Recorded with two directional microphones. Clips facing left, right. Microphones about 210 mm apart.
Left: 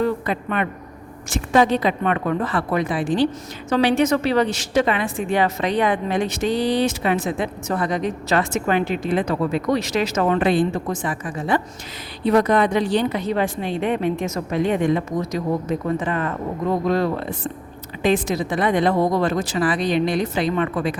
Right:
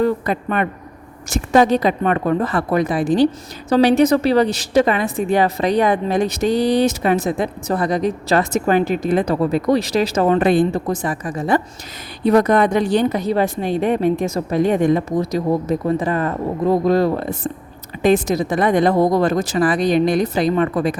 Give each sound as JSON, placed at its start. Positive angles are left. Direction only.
{"t": 0.0, "sound": "a woman's voice", "side_deg": -40}